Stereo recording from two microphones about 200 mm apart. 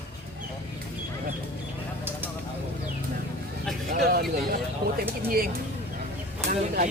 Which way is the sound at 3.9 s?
50° right (ahead or behind).